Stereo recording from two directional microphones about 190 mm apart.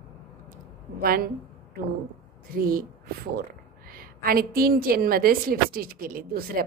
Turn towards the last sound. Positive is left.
turn(degrees=-50)  # may be behind; listen again after turning